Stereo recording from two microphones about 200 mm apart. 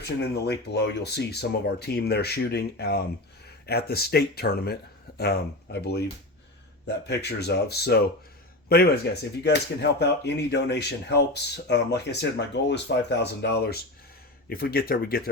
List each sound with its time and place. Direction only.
0.4 s speech: 55° left (ahead or behind)